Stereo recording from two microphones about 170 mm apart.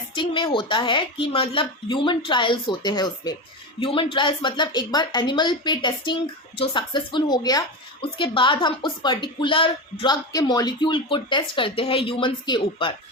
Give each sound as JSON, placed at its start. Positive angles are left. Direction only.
{"t": 0.1, "sound": "a woman's voice", "side_deg": 30}